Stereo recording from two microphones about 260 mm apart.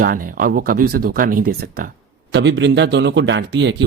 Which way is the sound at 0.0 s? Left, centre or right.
Right.